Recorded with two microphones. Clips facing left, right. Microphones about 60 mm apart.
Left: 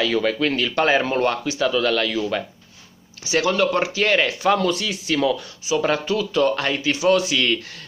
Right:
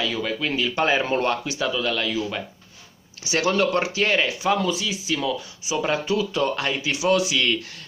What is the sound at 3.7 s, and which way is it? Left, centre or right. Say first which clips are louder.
Speech: left 2 dB; left.